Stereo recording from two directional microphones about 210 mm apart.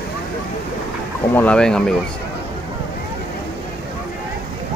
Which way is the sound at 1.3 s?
5° left (ahead or behind).